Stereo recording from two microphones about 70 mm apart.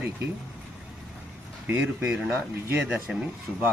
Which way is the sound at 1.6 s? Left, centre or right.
Right.